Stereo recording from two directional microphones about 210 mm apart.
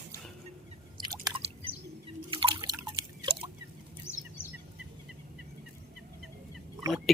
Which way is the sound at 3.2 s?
25° right (ahead or behind).